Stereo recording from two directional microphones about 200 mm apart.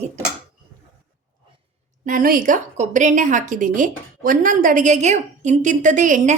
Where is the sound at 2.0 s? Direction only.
45° right (ahead or behind).